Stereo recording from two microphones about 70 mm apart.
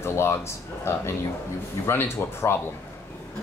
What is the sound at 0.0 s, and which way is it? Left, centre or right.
Speech, left.